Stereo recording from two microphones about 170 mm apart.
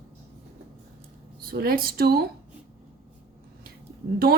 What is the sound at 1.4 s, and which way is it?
Speech, 60° right (ahead or behind).